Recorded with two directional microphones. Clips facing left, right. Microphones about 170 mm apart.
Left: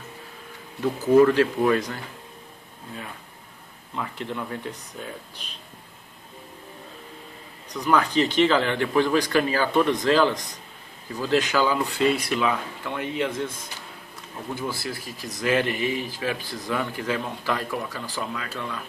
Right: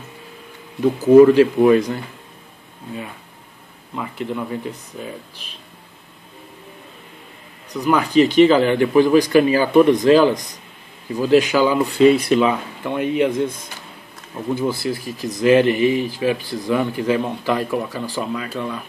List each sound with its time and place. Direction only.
1.1 s speech: 15° right (ahead or behind)
3.9 s speech: 5° right (ahead or behind)
7.7 s speech: 10° right (ahead or behind)
14.5 s speech: 20° right (ahead or behind)